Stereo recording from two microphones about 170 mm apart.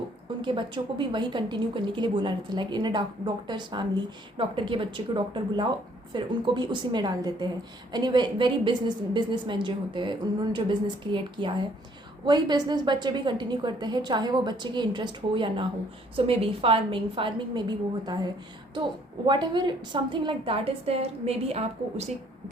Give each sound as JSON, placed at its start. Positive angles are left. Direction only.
{"t": 0.4, "sound": "a woman's voice", "side_deg": -30}
{"t": 19.3, "sound": "a woman's voice", "side_deg": -25}